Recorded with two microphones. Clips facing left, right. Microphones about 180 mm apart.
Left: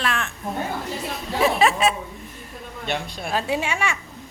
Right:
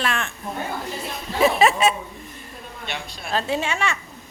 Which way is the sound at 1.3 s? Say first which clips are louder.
Right 2 dB; centre (ahead or behind).